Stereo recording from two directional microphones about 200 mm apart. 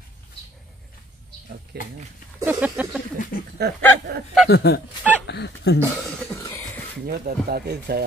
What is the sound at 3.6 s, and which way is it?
Speech, 55° right (ahead or behind).